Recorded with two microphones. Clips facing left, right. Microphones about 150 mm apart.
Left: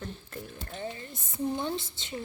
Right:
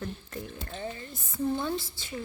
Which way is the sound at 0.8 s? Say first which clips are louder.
Left 1 dB; 20° left (ahead or behind).